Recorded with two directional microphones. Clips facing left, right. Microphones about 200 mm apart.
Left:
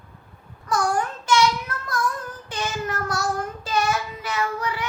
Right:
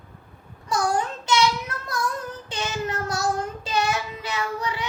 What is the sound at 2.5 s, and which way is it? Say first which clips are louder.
Speech: left 1 dB; 20° right (ahead or behind).